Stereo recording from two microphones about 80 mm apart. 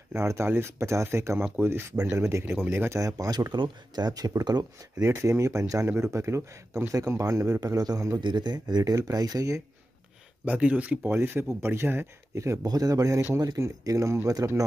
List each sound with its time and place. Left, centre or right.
0.1 s speech: right
3.0 s speech: right
5.0 s speech: right
8.2 s a man's voice: right
8.9 s speech: right
10.4 s speech: centre
12.6 s speech: right